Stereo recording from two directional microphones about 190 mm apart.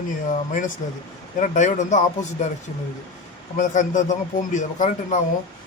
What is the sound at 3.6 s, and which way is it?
A man's voice, 40° left (ahead or behind).